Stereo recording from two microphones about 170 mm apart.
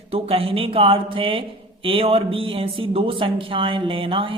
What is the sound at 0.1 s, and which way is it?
Speech, 35° right (ahead or behind).